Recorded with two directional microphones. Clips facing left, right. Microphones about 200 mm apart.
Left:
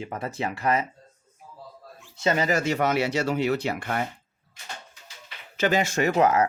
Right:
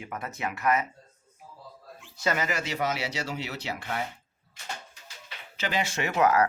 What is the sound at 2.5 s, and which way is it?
Speech, 50° left (ahead or behind).